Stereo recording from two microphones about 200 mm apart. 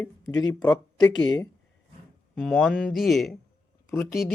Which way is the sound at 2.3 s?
Centre (ahead or behind).